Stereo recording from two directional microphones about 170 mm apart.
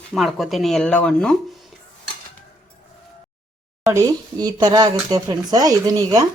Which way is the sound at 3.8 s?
20° right (ahead or behind).